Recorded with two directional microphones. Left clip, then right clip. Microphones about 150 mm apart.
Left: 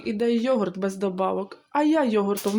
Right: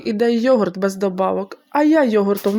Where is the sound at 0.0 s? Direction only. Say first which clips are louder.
Right 7 dB; 40° right (ahead or behind).